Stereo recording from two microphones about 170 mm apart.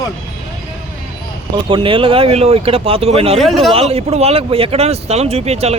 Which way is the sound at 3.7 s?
35° right (ahead or behind).